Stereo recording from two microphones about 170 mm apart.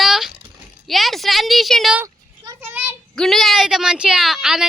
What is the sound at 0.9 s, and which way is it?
Speech, centre (ahead or behind).